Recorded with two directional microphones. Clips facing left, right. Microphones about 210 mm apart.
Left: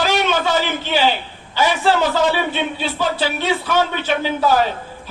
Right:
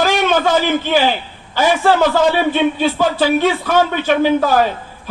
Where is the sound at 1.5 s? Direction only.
50° right (ahead or behind).